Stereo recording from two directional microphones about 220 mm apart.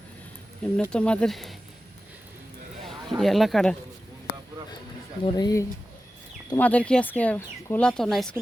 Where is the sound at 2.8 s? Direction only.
Centre (ahead or behind).